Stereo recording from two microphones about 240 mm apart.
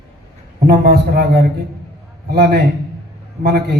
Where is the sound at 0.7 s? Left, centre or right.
Right.